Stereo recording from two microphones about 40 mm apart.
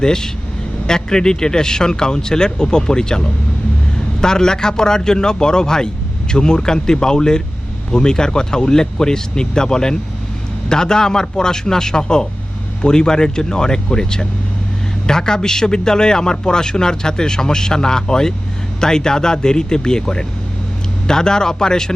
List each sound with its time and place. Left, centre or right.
0.0 s a man's voice: centre